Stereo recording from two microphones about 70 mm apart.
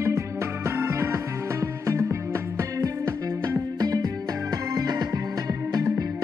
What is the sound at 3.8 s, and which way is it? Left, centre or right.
Music, right.